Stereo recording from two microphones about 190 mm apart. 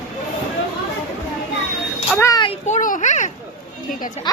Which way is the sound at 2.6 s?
40° left (ahead or behind).